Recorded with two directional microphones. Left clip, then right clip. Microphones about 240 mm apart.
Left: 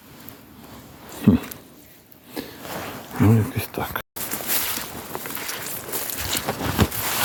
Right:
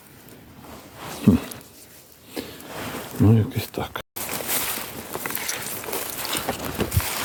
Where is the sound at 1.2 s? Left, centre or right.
Centre.